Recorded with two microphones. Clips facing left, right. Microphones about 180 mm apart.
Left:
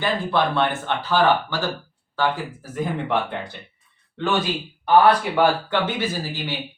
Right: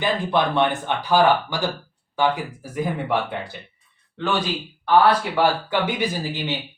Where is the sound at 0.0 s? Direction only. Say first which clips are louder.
Right 1 dB; 15° right (ahead or behind).